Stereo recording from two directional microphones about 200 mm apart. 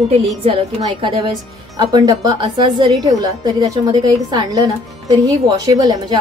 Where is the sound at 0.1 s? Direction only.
30° right (ahead or behind).